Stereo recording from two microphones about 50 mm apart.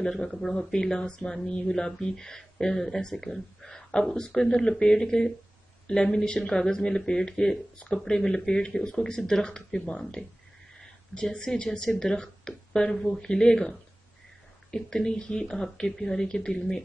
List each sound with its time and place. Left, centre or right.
0.2 s speech: centre